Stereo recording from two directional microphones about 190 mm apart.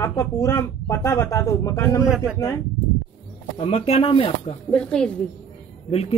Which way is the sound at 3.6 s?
30° left (ahead or behind).